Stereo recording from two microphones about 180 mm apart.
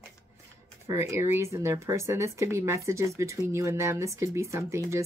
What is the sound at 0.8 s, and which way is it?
Speech, 15° right (ahead or behind).